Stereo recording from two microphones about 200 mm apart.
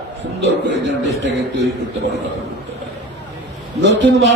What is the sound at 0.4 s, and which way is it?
A man's voice, 60° right (ahead or behind).